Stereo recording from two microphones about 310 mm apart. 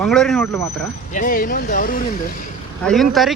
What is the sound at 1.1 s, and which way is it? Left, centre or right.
Speech, left.